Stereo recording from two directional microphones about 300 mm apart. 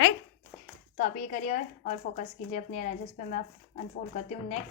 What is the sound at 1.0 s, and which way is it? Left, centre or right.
Speech, left.